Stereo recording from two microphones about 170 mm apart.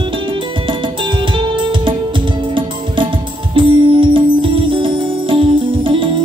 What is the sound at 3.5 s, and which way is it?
Music, 30° right (ahead or behind).